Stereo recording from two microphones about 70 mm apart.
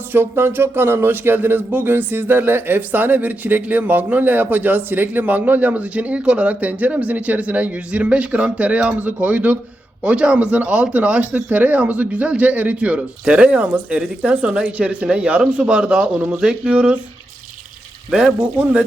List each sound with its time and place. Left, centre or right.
0.1 s speech: right; by 17.0 s centre
18.1 s speech: centre